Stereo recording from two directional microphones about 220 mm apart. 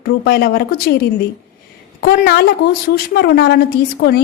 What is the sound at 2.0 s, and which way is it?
A woman's voice, 45° left (ahead or behind).